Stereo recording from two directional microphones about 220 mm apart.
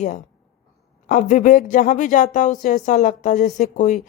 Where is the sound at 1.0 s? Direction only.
35° left (ahead or behind).